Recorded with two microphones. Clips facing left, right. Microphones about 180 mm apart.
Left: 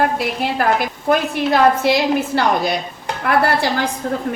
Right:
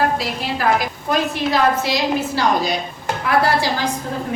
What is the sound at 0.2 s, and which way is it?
A woman's voice, 55° left (ahead or behind).